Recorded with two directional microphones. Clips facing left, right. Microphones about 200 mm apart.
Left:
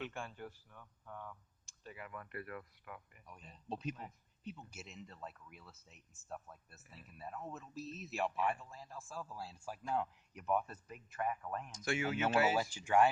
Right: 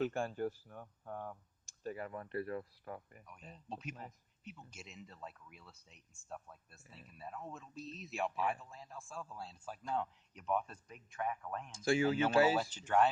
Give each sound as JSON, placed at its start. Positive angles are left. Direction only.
{"t": 0.0, "sound": "speech", "side_deg": -40}
{"t": 3.7, "sound": "speech", "side_deg": 35}
{"t": 4.7, "sound": "speech", "side_deg": 0}
{"t": 11.7, "sound": "speech", "side_deg": -30}
{"t": 12.5, "sound": "speech", "side_deg": 10}